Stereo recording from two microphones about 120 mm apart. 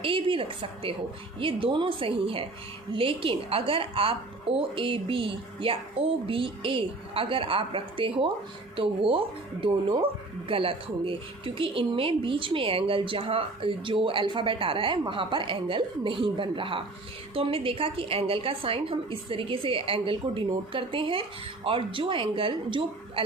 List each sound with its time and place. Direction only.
0.0 s speech: 50° right (ahead or behind)